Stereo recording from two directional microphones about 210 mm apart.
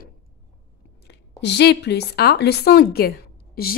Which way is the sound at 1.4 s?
55° left (ahead or behind).